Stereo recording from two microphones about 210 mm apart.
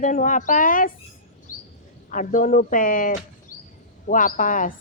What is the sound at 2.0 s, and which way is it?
Speech, 40° left (ahead or behind).